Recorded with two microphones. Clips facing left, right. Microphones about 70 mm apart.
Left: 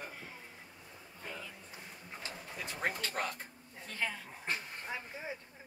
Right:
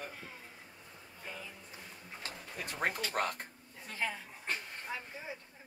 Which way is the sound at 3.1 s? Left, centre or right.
Right.